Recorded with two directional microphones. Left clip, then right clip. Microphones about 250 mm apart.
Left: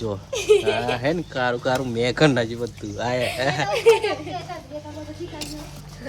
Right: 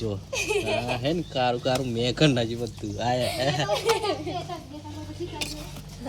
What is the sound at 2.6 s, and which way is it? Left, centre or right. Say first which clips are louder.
Speech: left 2 dB; centre.